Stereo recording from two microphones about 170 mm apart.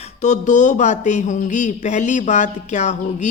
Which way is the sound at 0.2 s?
45° left (ahead or behind).